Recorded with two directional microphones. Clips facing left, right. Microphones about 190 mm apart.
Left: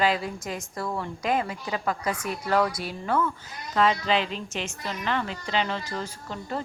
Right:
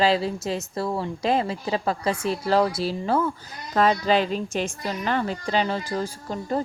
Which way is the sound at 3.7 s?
40° right (ahead or behind).